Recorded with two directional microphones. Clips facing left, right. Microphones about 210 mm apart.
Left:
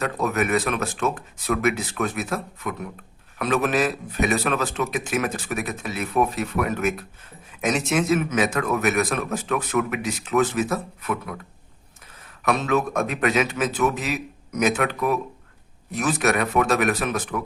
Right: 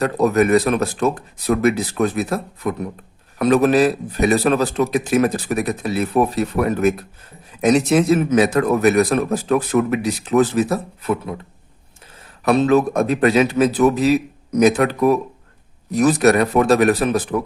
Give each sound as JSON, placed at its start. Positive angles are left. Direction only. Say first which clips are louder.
{"t": 0.0, "sound": "a man's voice", "louder": "right 8 dB", "side_deg": -35}
{"t": 12.5, "sound": "a man's voice", "louder": "right 7 dB", "side_deg": -35}